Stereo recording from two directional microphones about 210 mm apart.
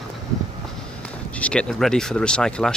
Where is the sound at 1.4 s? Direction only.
5° left (ahead or behind).